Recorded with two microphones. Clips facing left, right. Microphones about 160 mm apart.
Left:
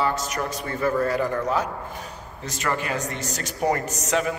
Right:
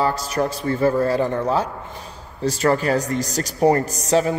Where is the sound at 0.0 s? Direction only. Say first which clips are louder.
Right 4 dB; 35° right (ahead or behind).